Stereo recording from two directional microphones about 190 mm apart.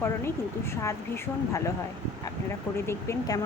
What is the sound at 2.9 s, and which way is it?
Speech, 15° left (ahead or behind).